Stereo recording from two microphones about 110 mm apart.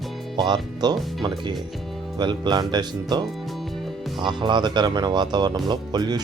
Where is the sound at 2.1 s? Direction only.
45° right (ahead or behind).